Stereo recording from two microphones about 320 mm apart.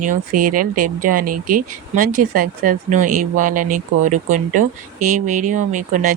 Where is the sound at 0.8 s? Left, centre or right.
Right.